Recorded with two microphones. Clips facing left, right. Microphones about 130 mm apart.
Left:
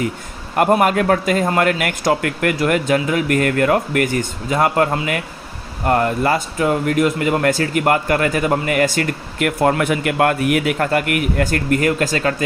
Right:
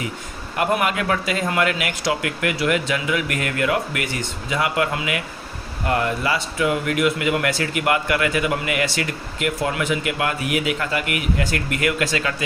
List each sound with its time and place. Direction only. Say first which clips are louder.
0.5 s speech: left 6 dB; 45° left (ahead or behind)